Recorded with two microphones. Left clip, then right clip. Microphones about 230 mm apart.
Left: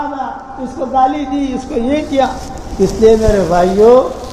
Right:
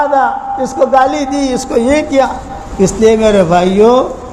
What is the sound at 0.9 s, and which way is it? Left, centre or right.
Speech, right.